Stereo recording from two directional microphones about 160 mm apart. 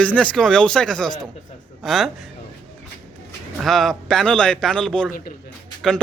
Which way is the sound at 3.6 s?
Centre (ahead or behind).